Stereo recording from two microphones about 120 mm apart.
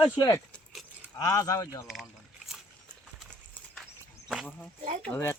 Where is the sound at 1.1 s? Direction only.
30° left (ahead or behind).